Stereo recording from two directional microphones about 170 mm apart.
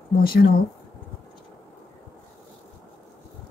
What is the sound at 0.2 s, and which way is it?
Speech, 60° left (ahead or behind).